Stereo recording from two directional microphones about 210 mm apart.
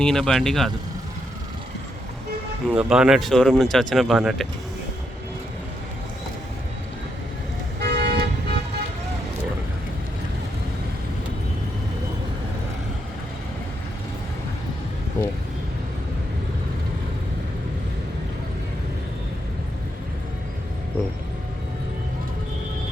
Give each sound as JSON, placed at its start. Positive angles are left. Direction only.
{"t": 0.0, "sound": "speech", "side_deg": 0}
{"t": 2.6, "sound": "speech", "side_deg": -5}
{"t": 7.8, "sound": "toot", "side_deg": -55}